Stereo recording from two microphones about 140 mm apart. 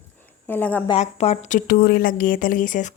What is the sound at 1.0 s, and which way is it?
A woman's voice, 50° left (ahead or behind).